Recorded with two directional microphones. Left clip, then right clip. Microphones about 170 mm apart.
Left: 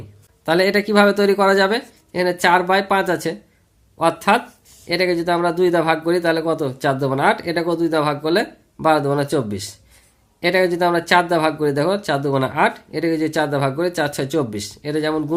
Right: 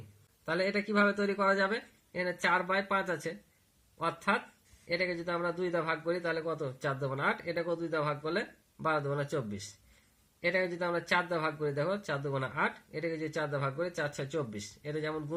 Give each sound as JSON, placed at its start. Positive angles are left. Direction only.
{"t": 0.4, "sound": "speech", "side_deg": 45}